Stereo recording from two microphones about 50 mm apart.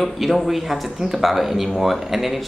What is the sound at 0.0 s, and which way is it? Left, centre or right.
Speech, centre.